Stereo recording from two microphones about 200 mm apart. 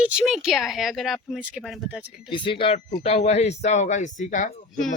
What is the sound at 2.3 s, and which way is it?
Speech, 25° left (ahead or behind).